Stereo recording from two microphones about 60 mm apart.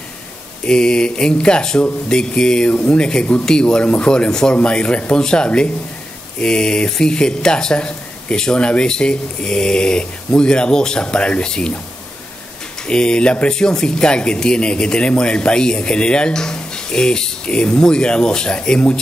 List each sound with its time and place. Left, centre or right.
0.7 s speech: centre
12.8 s speech: centre